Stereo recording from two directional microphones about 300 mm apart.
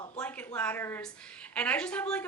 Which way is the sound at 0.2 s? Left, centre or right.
Centre.